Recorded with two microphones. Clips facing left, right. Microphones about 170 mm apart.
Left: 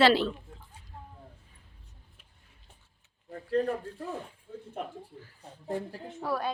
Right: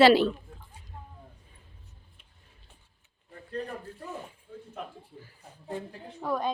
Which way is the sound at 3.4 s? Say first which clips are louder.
Left 8 dB; 90° left.